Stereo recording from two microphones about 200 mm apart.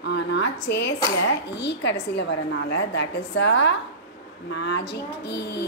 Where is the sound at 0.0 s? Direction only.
60° left (ahead or behind).